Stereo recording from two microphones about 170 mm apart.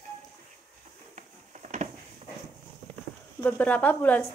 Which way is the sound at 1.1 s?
45° right (ahead or behind).